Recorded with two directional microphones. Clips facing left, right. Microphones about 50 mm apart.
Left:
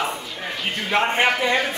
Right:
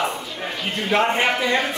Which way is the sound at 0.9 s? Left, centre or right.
Centre.